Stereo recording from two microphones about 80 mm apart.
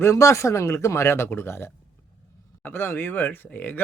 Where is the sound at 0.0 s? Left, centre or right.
Left.